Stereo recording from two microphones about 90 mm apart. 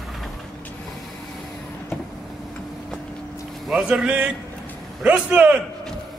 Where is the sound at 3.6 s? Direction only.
5° right (ahead or behind).